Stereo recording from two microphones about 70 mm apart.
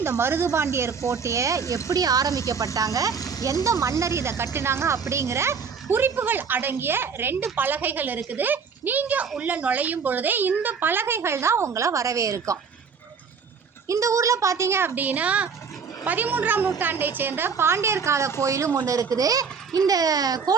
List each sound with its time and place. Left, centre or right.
0.0 s a woman's voice: right
1.9 s a child's voice: right
3.2 s a sound: left
3.4 s a woman's voice: right
13.8 s a woman's voice: right
15.0 s a woman's voice: right
19.1 s a child's voice: right